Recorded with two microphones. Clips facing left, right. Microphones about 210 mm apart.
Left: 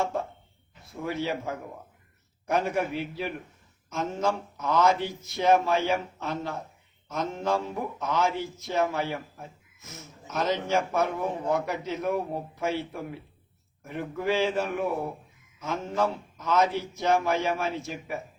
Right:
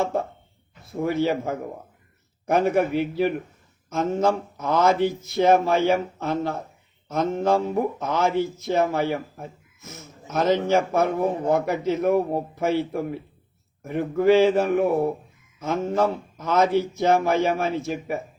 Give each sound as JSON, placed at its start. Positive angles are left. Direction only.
{"t": 0.9, "sound": "a man's voice", "side_deg": -45}